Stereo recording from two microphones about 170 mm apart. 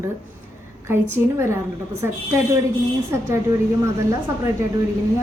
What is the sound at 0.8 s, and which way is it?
Speech, 15° right (ahead or behind).